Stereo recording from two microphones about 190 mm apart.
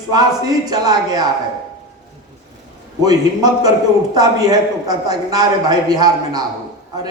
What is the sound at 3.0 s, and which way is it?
A man's voice, 20° right (ahead or behind).